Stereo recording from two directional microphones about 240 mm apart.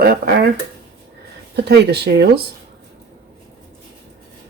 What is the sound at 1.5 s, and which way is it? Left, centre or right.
Speech, right.